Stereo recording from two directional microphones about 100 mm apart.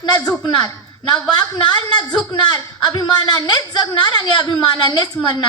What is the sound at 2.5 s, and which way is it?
Speech, 45° left (ahead or behind).